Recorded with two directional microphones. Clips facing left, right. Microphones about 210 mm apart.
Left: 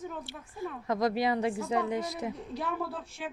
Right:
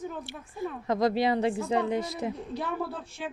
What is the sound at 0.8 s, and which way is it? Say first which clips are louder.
Speech: right 3 dB; 30° right (ahead or behind).